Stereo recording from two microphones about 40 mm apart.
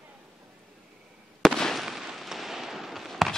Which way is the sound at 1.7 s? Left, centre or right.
Centre.